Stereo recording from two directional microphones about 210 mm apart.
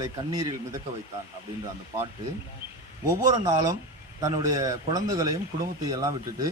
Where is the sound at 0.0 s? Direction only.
15° right (ahead or behind).